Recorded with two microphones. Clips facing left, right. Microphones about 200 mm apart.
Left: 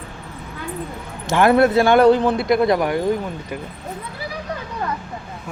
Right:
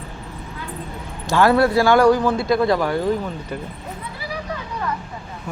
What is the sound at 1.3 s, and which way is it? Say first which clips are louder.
Speech: left 1 dB; 20° left (ahead or behind).